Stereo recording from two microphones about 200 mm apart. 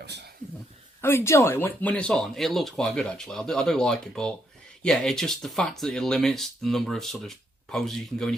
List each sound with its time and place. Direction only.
1.0 s speech: 15° left (ahead or behind)